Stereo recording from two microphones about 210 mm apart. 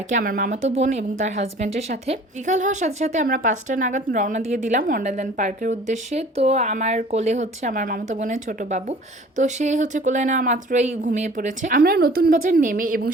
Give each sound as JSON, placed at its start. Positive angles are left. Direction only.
{"t": 0.1, "sound": "a woman's voice", "side_deg": -45}